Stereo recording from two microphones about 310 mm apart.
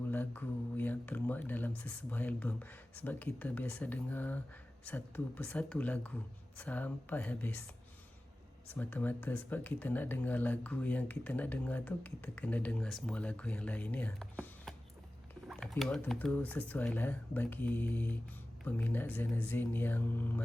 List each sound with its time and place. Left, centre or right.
0.1 s speech: centre
8.6 s speech: centre
14.4 s music: centre
15.4 s speech: centre